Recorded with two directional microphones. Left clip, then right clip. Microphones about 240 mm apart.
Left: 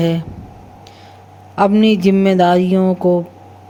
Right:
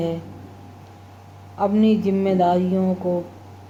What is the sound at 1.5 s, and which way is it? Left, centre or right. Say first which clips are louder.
Speech: left 7 dB; left.